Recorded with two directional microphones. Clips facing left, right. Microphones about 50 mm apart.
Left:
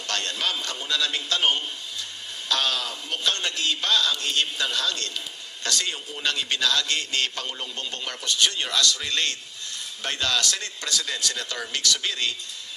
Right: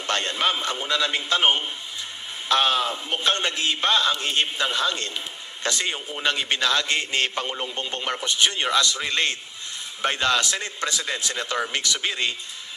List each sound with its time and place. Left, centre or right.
0.0 s a man's voice: right